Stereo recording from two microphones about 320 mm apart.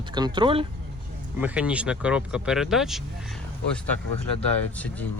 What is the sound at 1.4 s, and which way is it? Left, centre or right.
Speech, centre.